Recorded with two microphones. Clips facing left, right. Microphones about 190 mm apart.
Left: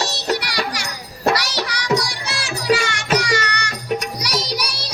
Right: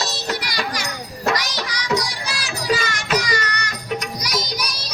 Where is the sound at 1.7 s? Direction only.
70° left (ahead or behind).